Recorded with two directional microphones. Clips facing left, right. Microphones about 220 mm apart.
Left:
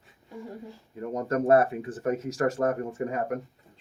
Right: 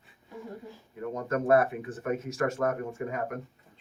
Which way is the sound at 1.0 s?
35° left (ahead or behind).